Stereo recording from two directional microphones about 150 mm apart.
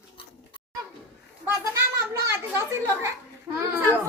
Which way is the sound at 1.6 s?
20° right (ahead or behind).